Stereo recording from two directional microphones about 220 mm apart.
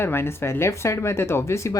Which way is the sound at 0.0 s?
10° left (ahead or behind).